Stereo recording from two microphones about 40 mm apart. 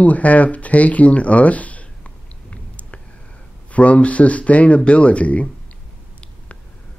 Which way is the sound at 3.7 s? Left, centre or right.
Left.